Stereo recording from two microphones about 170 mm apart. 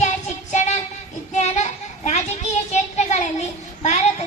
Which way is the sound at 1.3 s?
45° left (ahead or behind).